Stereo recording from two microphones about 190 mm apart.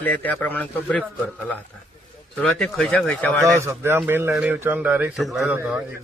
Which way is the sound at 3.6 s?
15° right (ahead or behind).